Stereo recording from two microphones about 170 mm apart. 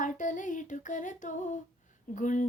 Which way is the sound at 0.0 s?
50° left (ahead or behind).